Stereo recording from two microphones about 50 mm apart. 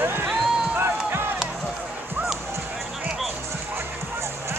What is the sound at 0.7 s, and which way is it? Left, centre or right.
Run, right.